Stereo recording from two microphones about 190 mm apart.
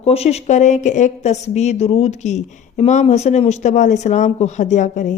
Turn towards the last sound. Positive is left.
turn(degrees=40)  # may be behind; listen again after turning